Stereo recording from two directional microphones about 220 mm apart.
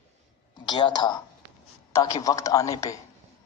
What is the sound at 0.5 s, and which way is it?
A man's voice, 20° left (ahead or behind).